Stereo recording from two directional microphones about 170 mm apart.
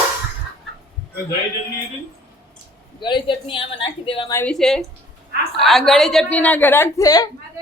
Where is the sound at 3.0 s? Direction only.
25° left (ahead or behind).